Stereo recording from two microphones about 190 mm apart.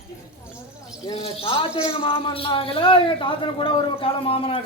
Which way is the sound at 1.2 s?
30° left (ahead or behind).